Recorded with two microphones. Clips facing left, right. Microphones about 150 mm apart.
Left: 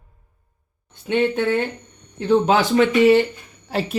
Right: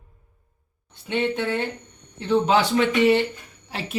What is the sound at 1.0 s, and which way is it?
Speech, 50° left (ahead or behind).